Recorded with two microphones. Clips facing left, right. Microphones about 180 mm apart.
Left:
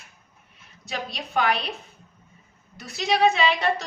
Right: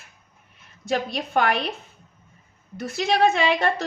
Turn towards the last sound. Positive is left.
turn(degrees=-50)  # may be behind; listen again after turning